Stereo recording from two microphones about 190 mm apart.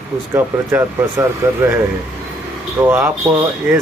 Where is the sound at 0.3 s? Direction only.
10° right (ahead or behind).